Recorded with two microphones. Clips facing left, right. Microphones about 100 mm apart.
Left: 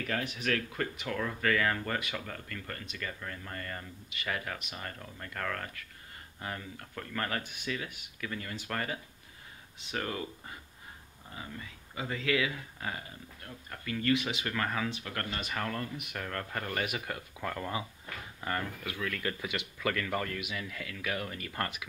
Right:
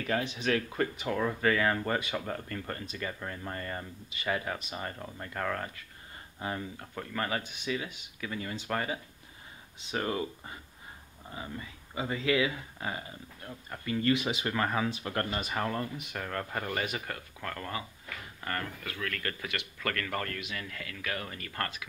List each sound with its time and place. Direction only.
0.2 s speech: 25° right (ahead or behind)
4.6 s speech: 30° right (ahead or behind)
4.8 s speech: 20° right (ahead or behind)
11.9 s speech: 15° right (ahead or behind)
16.1 s speech: 5° right (ahead or behind)
16.8 s speech: 5° left (ahead or behind)
19.4 s speech: 15° left (ahead or behind)
21.5 s speech: 15° left (ahead or behind)